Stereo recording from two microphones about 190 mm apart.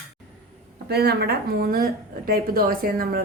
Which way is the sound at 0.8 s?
55° right (ahead or behind).